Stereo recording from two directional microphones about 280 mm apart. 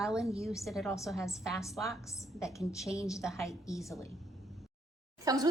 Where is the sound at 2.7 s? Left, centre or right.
Centre.